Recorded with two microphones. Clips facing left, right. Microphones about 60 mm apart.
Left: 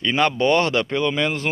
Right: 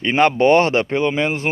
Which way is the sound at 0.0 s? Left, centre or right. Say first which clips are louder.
Right 5 dB; right.